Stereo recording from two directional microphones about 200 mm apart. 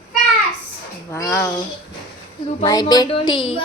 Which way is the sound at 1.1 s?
10° left (ahead or behind).